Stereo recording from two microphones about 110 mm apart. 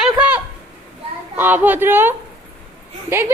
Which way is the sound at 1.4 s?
15° right (ahead or behind).